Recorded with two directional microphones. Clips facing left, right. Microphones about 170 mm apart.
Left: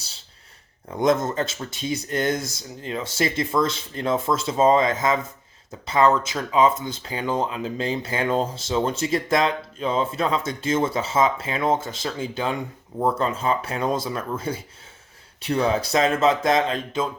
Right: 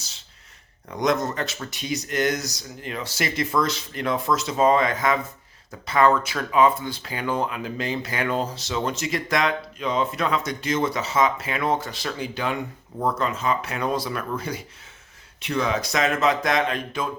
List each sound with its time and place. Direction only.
0.9 s speech: 25° left (ahead or behind)